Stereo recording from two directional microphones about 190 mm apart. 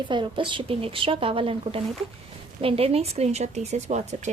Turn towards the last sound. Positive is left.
turn(degrees=-35)  # may be behind; listen again after turning